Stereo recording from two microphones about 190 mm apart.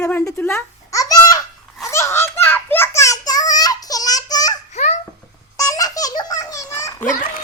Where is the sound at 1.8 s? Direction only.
15° left (ahead or behind).